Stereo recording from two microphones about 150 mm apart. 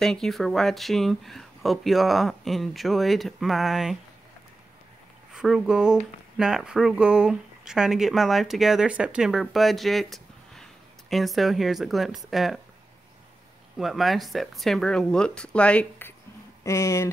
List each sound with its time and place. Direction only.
0.0 s speech: centre (ahead or behind)
5.3 s speech: 5° right (ahead or behind)
13.7 s speech: centre (ahead or behind); by 17.1 s 20° left (ahead or behind)